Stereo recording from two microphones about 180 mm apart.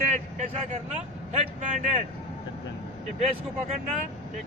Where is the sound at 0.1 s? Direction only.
40° right (ahead or behind).